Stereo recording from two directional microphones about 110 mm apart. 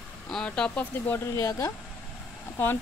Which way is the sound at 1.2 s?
30° left (ahead or behind).